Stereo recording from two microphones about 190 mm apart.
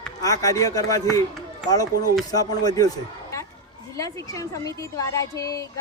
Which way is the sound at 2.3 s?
20° left (ahead or behind).